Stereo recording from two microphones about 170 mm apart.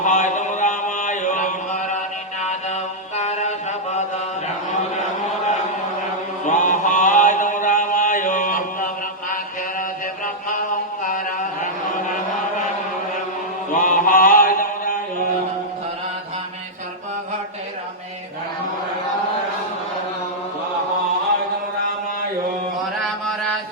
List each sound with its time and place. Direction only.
0.0 s mantra: 45° left (ahead or behind)
6.4 s mantra: 45° left (ahead or behind)
13.7 s mantra: 50° left (ahead or behind)
23.0 s mantra: 5° left (ahead or behind)